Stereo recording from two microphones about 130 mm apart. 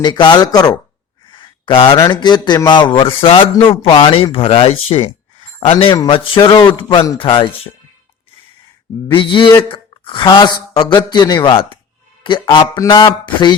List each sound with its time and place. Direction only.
0.0 s speech: 35° left (ahead or behind)
1.3 s a sound: 40° left (ahead or behind)
2.0 s speech: 35° left (ahead or behind)
9.0 s speech: 40° left (ahead or behind)
12.8 s speech: 25° left (ahead or behind)